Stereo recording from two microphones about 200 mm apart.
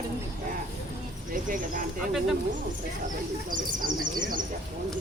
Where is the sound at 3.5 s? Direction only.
40° right (ahead or behind).